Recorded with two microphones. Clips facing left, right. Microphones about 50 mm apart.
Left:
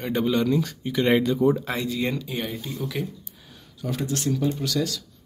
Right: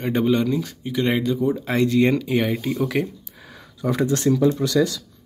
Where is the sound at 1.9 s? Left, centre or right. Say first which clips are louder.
Right 9 dB; right.